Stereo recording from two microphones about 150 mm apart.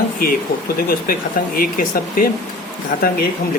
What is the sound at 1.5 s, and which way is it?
Speech, 70° left (ahead or behind).